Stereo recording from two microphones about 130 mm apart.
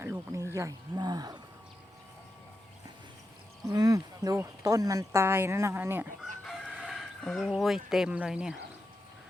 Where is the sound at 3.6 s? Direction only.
25° right (ahead or behind).